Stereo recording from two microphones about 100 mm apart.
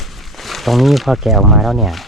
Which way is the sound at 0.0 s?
Centre (ahead or behind).